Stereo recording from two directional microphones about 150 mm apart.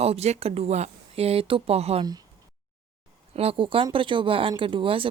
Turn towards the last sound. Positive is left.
turn(degrees=-35)  # may be behind; listen again after turning